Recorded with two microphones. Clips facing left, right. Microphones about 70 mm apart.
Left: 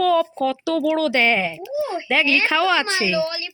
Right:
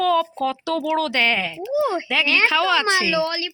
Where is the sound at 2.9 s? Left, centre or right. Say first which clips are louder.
Right 1 dB; right.